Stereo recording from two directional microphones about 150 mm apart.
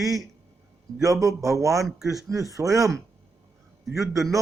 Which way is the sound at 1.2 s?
20° right (ahead or behind).